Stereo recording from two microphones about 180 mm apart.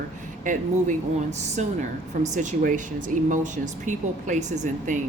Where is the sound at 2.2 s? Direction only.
40° right (ahead or behind).